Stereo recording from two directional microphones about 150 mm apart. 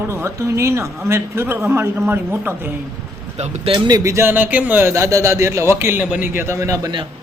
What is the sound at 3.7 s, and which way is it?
Speech, 25° right (ahead or behind).